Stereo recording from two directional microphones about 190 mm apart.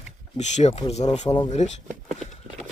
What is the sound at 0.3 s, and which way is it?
Speech, 35° left (ahead or behind).